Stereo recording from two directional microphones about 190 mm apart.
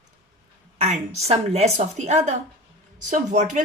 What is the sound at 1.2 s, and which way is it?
Speech, 35° right (ahead or behind).